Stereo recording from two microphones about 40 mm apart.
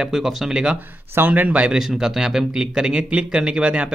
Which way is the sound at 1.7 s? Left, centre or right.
Centre.